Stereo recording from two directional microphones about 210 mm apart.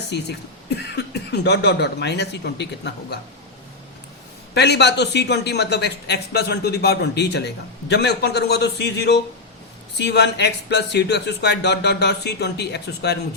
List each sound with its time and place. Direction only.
0.1 s speech: 55° left (ahead or behind)
4.5 s speech: 55° left (ahead or behind)